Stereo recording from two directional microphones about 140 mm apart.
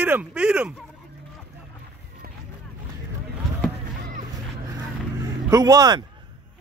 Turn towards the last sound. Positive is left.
turn(degrees=-25)  # may be behind; listen again after turning